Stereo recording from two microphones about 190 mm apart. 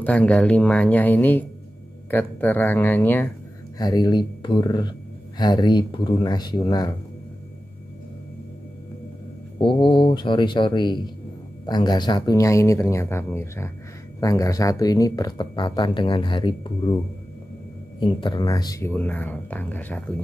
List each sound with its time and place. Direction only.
0.0 s speech: 5° left (ahead or behind)
3.7 s speech: 20° left (ahead or behind)
9.6 s speech: 25° left (ahead or behind)
18.0 s speech: 25° left (ahead or behind); by 20.2 s 10° left (ahead or behind)